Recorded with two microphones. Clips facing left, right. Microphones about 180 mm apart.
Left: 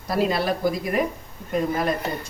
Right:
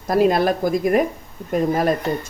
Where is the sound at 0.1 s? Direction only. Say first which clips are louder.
Right 6 dB; 50° right (ahead or behind).